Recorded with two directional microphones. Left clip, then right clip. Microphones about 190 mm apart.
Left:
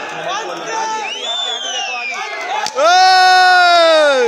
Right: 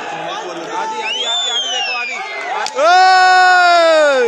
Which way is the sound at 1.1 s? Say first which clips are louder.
Right 3 dB; 70° right (ahead or behind).